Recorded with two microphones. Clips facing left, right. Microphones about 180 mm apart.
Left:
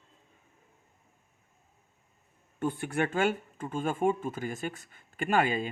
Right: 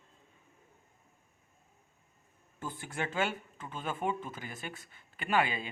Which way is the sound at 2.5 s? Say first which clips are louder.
Left 9 dB; 65° left (ahead or behind).